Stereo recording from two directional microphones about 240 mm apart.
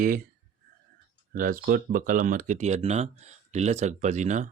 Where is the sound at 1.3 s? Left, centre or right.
Right.